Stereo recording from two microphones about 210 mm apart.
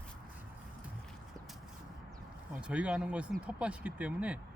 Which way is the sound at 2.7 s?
5° right (ahead or behind).